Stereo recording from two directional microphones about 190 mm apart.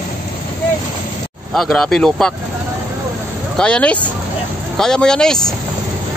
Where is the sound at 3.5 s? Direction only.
5° left (ahead or behind).